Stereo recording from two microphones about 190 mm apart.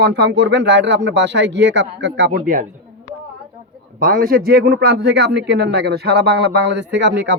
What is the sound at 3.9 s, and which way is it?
Speech, 50° right (ahead or behind).